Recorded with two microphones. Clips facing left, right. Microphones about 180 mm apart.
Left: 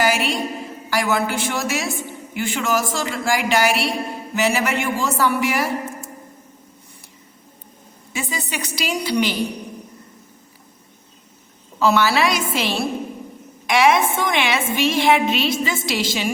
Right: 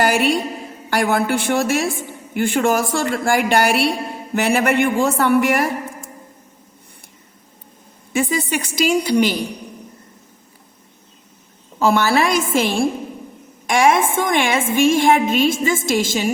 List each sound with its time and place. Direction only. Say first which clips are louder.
0.0 s a sound: right 3 dB; 55° right (ahead or behind)
0.9 s a woman's voice: right 3 dB; 55° right (ahead or behind)
8.1 s a woman's voice: right 8 dB; 55° right (ahead or behind)
11.8 s a woman's voice: right 1 dB; 50° right (ahead or behind)